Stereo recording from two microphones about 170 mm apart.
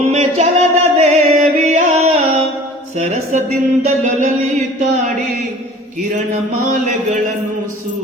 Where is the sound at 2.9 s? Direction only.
40° right (ahead or behind).